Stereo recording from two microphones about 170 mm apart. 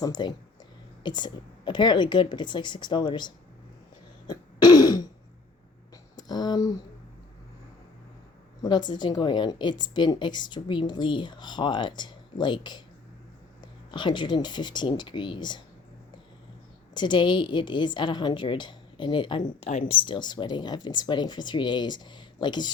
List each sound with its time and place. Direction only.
0.0 s a woman's voice: 25° left (ahead or behind)
4.3 s throat clearing: 25° left (ahead or behind)
6.1 s speech: 25° left (ahead or behind)
8.6 s a woman's voice: 25° left (ahead or behind)
13.9 s a woman's voice: 25° left (ahead or behind)
16.9 s a woman's voice: 25° left (ahead or behind)